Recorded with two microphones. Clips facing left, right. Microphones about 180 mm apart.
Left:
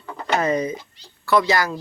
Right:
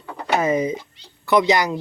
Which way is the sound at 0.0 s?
5° right (ahead or behind).